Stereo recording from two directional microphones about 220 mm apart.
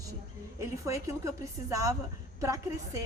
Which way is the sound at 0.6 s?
15° right (ahead or behind).